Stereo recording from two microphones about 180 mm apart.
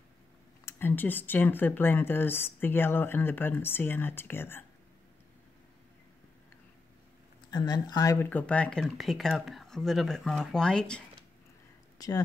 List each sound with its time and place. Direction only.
0.7 s speech: 10° left (ahead or behind)
7.5 s speech: 20° left (ahead or behind); by 11.0 s 5° left (ahead or behind)
12.0 s speech: 20° left (ahead or behind)